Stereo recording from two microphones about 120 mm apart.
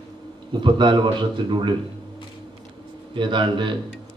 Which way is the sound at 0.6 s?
40° right (ahead or behind).